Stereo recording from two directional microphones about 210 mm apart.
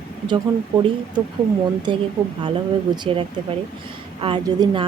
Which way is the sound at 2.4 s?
25° right (ahead or behind).